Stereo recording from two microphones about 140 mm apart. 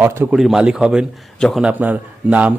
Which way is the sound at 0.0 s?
20° right (ahead or behind).